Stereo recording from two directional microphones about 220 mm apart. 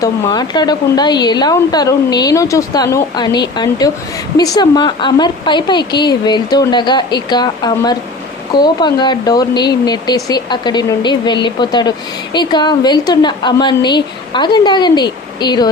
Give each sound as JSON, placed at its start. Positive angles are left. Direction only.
{"t": 0.0, "sound": "a woman's voice", "side_deg": 20}